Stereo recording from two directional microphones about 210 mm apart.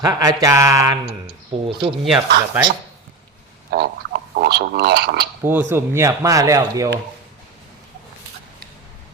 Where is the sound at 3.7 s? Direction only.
50° right (ahead or behind).